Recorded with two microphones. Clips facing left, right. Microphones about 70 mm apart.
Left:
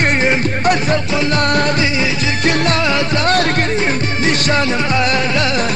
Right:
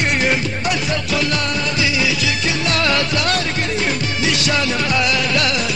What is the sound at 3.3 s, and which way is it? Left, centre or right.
Music, left.